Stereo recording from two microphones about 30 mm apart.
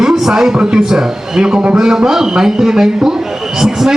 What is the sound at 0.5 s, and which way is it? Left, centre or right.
A man's voice, right.